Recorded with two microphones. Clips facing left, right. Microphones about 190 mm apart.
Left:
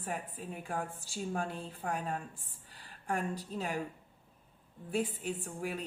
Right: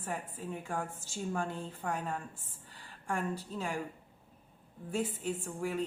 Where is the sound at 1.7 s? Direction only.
10° left (ahead or behind).